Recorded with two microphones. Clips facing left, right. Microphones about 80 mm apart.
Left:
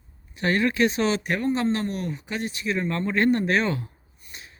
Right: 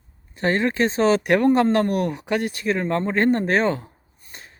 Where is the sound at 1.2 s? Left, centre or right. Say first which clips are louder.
Right 7 dB; right.